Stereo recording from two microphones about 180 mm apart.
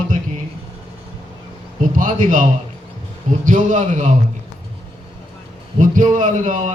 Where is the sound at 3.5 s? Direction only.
45° right (ahead or behind).